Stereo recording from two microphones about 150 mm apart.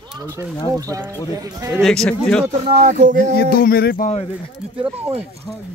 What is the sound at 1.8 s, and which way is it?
Speech, 5° left (ahead or behind).